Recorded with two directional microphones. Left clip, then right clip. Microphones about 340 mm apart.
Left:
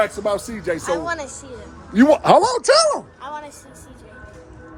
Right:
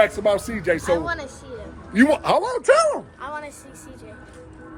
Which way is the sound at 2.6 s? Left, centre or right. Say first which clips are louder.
Left 2 dB; centre.